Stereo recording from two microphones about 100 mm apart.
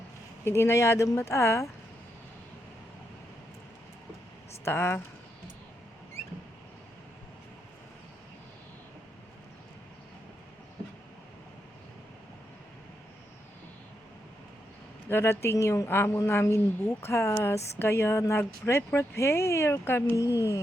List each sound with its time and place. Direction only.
0.4 s a woman's voice: 25° left (ahead or behind)
4.6 s a woman's voice: 25° left (ahead or behind)
15.1 s a woman's voice: 25° left (ahead or behind)